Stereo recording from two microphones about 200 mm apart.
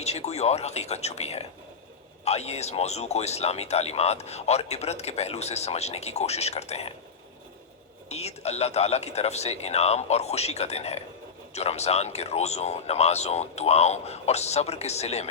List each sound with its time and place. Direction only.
0.0 s speech: 30° left (ahead or behind)
8.1 s speech: 30° left (ahead or behind)